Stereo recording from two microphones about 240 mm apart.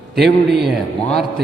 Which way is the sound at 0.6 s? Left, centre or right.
Centre.